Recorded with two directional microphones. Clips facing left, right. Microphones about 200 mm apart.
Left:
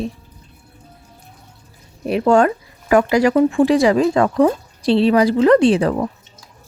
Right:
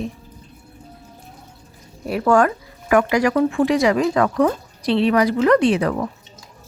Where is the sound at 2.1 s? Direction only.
25° left (ahead or behind).